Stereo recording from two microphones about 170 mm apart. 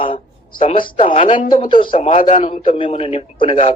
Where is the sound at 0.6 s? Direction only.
30° left (ahead or behind).